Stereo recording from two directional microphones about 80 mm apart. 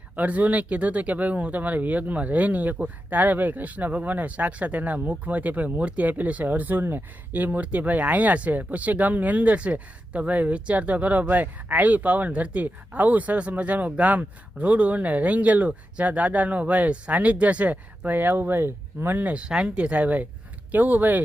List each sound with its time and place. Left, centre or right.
0.2 s speech: centre